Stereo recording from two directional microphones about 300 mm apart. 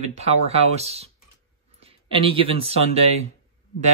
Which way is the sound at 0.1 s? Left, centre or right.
Right.